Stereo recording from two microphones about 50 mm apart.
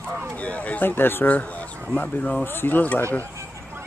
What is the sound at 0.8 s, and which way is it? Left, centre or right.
Speech, left.